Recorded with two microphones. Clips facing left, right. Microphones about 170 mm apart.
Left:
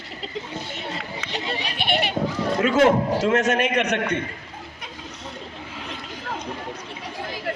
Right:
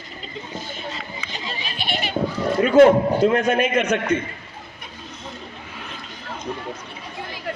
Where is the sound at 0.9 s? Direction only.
65° left (ahead or behind).